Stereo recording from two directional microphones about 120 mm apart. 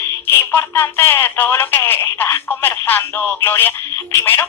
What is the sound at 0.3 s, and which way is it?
Speech, 15° left (ahead or behind).